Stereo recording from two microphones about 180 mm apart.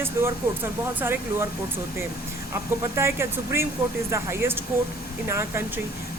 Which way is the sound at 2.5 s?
15° right (ahead or behind).